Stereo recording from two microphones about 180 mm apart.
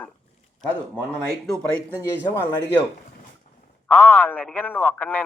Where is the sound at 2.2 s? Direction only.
15° left (ahead or behind).